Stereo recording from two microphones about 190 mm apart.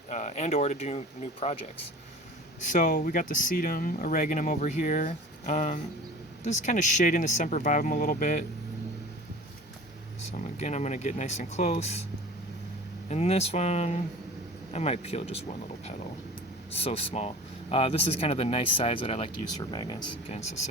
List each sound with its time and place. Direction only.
0.1 s speech: 35° left (ahead or behind)
2.6 s speech: 40° left (ahead or behind)
10.3 s speech: 40° left (ahead or behind)
13.1 s speech: 35° left (ahead or behind)